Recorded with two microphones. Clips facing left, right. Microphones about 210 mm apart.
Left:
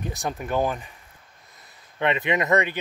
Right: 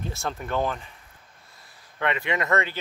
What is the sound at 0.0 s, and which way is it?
Speech, 15° left (ahead or behind).